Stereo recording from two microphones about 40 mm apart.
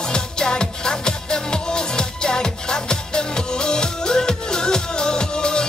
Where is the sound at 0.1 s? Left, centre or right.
Centre.